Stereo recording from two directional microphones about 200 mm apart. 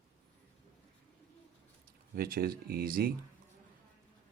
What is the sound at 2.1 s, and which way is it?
Speech, 50° right (ahead or behind).